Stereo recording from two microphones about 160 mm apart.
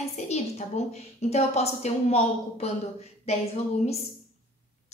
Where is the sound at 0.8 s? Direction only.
40° left (ahead or behind).